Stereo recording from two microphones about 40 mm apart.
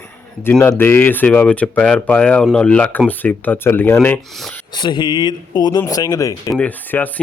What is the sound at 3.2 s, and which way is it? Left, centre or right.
Speech, left.